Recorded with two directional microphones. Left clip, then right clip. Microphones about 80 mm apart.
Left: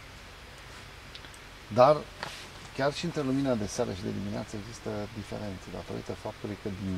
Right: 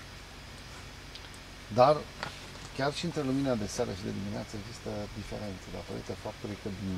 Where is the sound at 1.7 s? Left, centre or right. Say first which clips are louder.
Left 2 dB; centre.